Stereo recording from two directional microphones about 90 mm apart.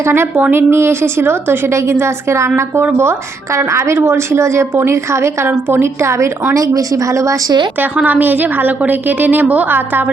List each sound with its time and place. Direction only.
0.0 s a woman's voice: 25° right (ahead or behind)
7.8 s a woman's voice: 15° right (ahead or behind)